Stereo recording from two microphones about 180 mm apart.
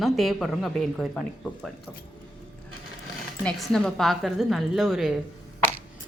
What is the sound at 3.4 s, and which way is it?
Speech, 5° left (ahead or behind).